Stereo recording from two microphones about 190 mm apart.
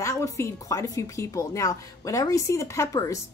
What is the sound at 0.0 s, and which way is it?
A woman's voice, 15° left (ahead or behind).